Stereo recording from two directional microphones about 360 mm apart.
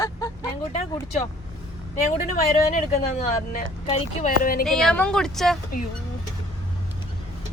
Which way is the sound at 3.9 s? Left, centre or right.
Left.